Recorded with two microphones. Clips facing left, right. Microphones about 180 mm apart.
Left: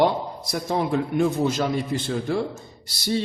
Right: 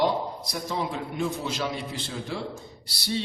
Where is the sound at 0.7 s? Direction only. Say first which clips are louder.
Left 8 dB; 55° left (ahead or behind).